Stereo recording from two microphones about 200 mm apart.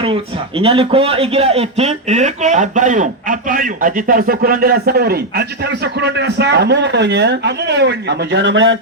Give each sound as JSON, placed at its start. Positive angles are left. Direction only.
{"t": 0.6, "sound": "a man's voice", "side_deg": -25}